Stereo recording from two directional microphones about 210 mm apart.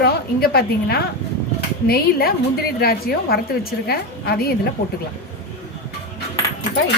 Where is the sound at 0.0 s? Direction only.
45° left (ahead or behind).